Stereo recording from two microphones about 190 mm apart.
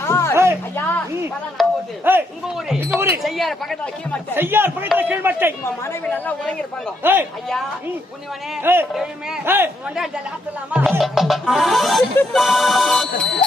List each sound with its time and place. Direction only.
0.0 s music: 15° left (ahead or behind)
1.6 s music: centre (ahead or behind)
2.1 s a man's voice: 10° right (ahead or behind)
2.9 s music: centre (ahead or behind)
4.4 s a man's voice: 10° right (ahead or behind)
5.8 s a woman's voice: 10° left (ahead or behind)
7.0 s a man's voice: 10° right (ahead or behind)
8.6 s a man's voice: 10° right (ahead or behind)
10.7 s music: 10° right (ahead or behind)